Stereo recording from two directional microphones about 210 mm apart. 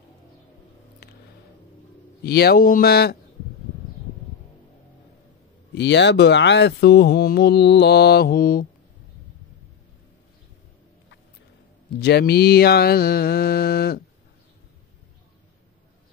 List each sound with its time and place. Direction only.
2.2 s speech: 50° left (ahead or behind)
5.8 s speech: 55° left (ahead or behind)
12.0 s speech: 50° left (ahead or behind)